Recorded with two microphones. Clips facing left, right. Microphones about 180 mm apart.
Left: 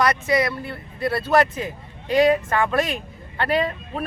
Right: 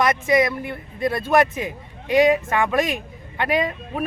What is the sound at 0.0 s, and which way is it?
A man's voice, 20° right (ahead or behind).